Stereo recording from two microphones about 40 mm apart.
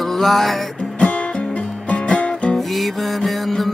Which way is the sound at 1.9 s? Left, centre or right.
Left.